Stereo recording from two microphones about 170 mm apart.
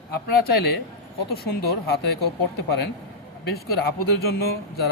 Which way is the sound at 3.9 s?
65° left (ahead or behind).